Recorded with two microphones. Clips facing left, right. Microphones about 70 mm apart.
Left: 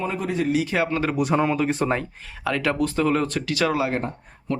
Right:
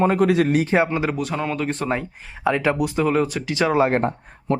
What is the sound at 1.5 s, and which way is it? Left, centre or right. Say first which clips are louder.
Speech: left 1 dB; centre.